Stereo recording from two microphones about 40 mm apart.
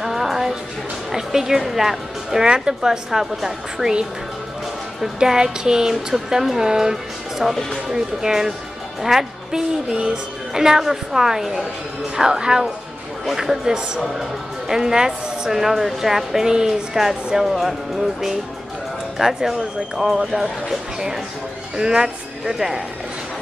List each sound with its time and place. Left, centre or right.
0.0 s music: centre
1.1 s a woman's voice: centre
3.1 s a woman's voice: centre
3.7 s speech: centre
5.2 s a woman's voice: centre
21.7 s a woman's voice: centre